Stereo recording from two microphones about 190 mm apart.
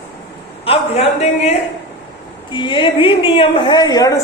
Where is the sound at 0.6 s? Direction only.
35° left (ahead or behind).